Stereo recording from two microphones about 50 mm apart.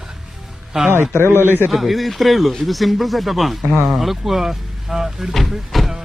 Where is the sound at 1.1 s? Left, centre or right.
Right.